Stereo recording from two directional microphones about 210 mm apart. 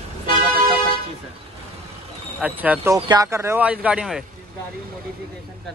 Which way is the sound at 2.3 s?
5° right (ahead or behind).